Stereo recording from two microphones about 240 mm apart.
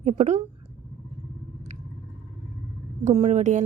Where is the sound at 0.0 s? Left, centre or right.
Right.